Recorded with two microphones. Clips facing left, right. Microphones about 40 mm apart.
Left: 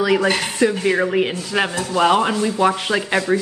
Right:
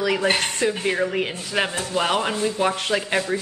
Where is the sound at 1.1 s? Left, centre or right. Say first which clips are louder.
Left 5 dB; centre.